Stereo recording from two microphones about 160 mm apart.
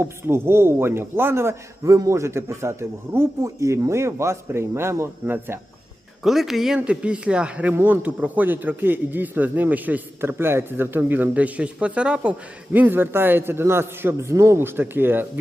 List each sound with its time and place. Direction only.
0.0 s speech: 15° right (ahead or behind)
6.2 s speech: centre (ahead or behind)